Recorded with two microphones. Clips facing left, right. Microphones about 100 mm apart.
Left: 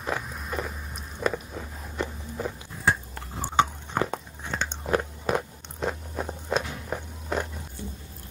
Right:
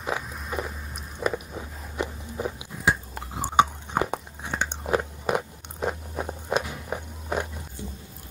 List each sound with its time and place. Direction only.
0.0 s biting: 5° right (ahead or behind)